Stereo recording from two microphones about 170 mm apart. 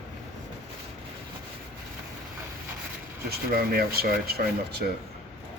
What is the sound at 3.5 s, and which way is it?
Speech, 65° right (ahead or behind).